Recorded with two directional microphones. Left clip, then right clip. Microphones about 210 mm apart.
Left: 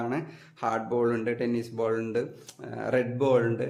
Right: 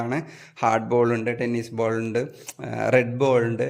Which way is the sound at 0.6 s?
35° right (ahead or behind).